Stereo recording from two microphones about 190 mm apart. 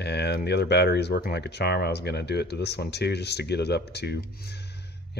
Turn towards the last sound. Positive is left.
turn(degrees=60)  # may be behind; listen again after turning